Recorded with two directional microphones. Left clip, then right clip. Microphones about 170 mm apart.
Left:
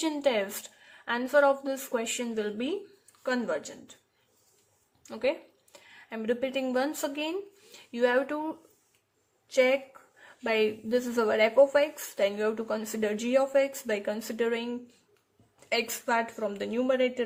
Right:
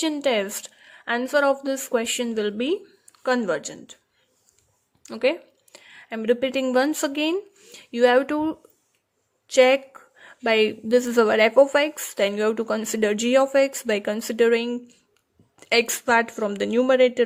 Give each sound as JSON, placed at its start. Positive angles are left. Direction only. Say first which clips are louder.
{"t": 0.0, "sound": "a woman's voice", "louder": "right 5 dB", "side_deg": -45}
{"t": 5.0, "sound": "a woman's voice", "louder": "right 7 dB", "side_deg": -45}